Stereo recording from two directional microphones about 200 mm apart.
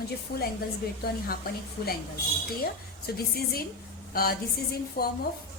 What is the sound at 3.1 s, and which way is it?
A woman's voice, 50° left (ahead or behind).